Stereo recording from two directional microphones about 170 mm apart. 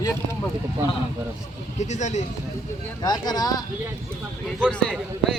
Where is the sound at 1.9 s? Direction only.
45° left (ahead or behind).